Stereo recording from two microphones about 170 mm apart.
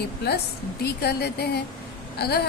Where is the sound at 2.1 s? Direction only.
70° left (ahead or behind).